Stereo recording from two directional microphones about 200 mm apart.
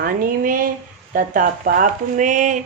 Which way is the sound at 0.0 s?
45° right (ahead or behind).